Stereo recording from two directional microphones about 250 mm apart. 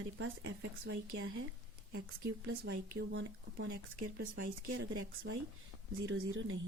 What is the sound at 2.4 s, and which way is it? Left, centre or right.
Speech, right.